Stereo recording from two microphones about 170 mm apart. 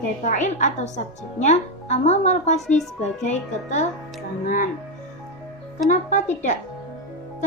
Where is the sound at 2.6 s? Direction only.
Centre (ahead or behind).